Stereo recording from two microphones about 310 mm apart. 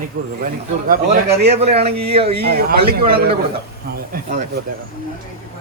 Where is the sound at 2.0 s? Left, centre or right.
Centre.